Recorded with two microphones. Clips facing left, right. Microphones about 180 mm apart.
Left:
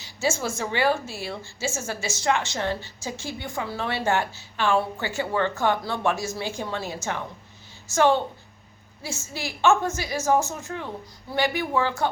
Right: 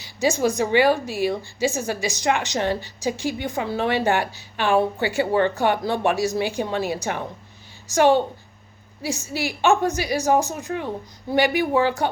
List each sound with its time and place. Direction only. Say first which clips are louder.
0.0 s a woman's voice: right 6 dB; 15° right (ahead or behind)